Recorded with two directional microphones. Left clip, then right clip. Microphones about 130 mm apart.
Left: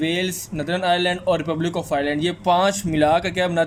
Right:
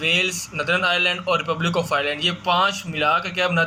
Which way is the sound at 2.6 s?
45° left (ahead or behind).